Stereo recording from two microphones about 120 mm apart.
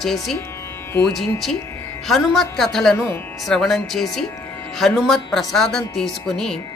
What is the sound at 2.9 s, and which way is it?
Speech, 20° left (ahead or behind).